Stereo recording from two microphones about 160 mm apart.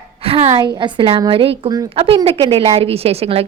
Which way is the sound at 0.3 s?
35° right (ahead or behind).